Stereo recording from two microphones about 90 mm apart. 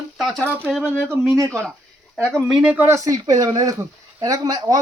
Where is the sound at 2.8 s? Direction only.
35° right (ahead or behind).